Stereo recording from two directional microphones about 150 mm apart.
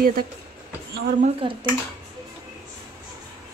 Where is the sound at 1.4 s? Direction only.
35° right (ahead or behind).